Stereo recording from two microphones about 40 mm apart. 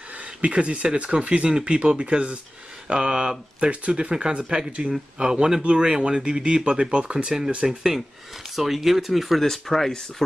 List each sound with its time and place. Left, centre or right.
0.4 s speech: right
3.6 s speech: right
7.6 s speech: centre